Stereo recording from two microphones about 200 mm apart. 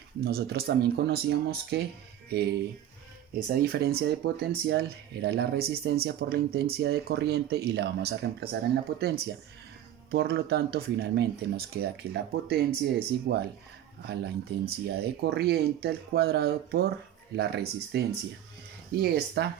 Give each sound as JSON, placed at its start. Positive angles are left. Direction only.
{"t": 0.3, "sound": "speech", "side_deg": -50}
{"t": 3.3, "sound": "speech", "side_deg": -50}
{"t": 14.6, "sound": "speech", "side_deg": -50}
{"t": 19.0, "sound": "speech", "side_deg": -55}